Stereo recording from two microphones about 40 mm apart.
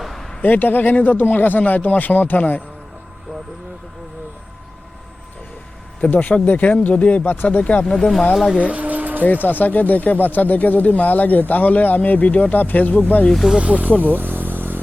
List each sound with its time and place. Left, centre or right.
0.0 s a sound: centre
0.4 s speech: left
6.1 s speech: left
7.9 s speech: centre
8.3 s speech: centre
8.5 s a sound: right
9.2 s speech: left
13.3 s speech: centre
13.6 s speech: right
14.0 s vehicle: right